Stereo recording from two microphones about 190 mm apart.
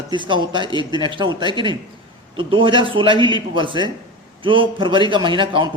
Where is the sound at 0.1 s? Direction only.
25° right (ahead or behind).